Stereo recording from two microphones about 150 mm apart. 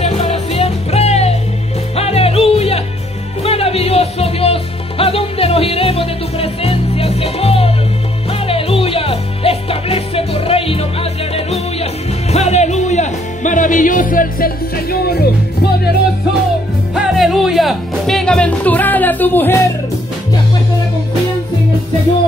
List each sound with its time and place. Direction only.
0.0 s music: 45° left (ahead or behind); by 15.9 s 90° left
16.9 s music: 5° right (ahead or behind); by 19.5 s 15° left (ahead or behind)